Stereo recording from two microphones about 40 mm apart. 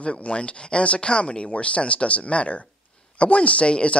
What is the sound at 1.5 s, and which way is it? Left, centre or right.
Speech, left.